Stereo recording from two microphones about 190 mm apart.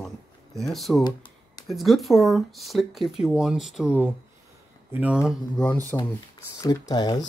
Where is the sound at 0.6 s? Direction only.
Centre (ahead or behind).